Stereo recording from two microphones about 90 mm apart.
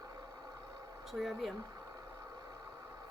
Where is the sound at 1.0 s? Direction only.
Centre (ahead or behind).